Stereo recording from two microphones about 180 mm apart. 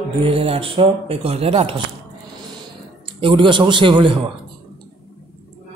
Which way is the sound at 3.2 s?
25° right (ahead or behind).